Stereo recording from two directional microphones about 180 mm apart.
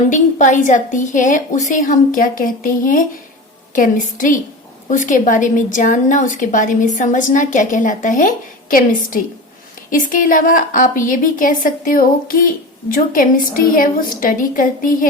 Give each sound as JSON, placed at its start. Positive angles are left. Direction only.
{"t": 0.1, "sound": "a woman's voice", "side_deg": 45}